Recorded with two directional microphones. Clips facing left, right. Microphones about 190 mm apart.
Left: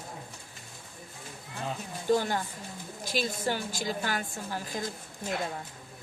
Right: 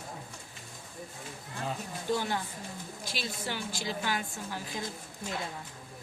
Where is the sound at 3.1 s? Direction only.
45° left (ahead or behind).